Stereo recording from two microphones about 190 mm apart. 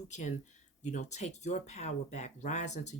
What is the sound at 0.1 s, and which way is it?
Speech, 40° left (ahead or behind).